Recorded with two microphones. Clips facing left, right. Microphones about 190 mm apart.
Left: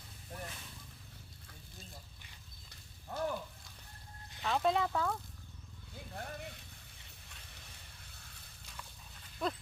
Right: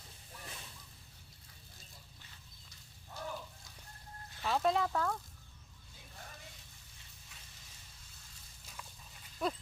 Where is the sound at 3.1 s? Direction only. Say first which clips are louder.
Left 9 dB; 60° left (ahead or behind).